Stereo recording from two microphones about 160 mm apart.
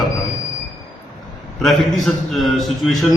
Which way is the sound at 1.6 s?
Centre (ahead or behind).